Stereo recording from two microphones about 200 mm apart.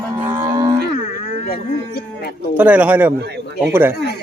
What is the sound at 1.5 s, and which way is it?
Speech, 50° left (ahead or behind).